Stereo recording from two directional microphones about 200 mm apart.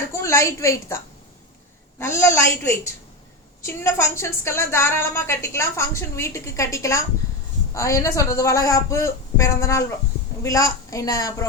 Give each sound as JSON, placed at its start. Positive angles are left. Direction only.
{"t": 0.1, "sound": "a woman's voice", "side_deg": 15}